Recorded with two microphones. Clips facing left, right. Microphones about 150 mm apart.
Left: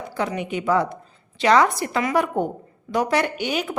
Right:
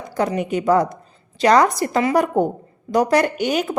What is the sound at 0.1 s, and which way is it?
A woman's voice, 40° right (ahead or behind).